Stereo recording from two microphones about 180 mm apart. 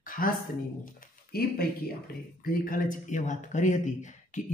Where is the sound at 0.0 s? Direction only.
50° left (ahead or behind).